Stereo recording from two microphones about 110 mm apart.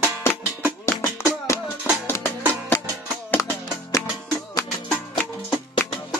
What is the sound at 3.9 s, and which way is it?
Music, 30° left (ahead or behind).